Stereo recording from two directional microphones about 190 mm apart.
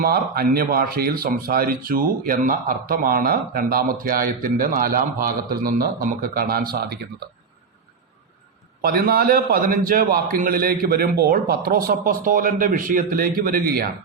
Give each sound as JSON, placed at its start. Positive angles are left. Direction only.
{"t": 0.0, "sound": "speech", "side_deg": -55}
{"t": 8.8, "sound": "speech", "side_deg": -55}